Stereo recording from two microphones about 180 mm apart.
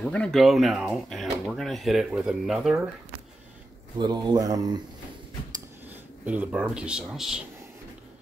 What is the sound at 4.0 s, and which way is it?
Speech, 25° right (ahead or behind).